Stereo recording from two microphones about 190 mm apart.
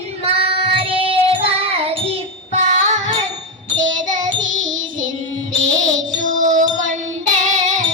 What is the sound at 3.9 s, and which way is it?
Child singing, 40° right (ahead or behind).